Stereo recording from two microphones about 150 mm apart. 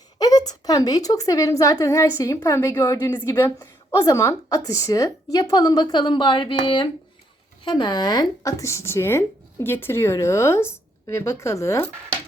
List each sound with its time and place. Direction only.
0.2 s a woman's voice: 25° left (ahead or behind)